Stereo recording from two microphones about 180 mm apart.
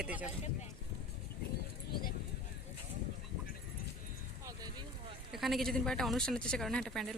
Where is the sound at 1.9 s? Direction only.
55° left (ahead or behind).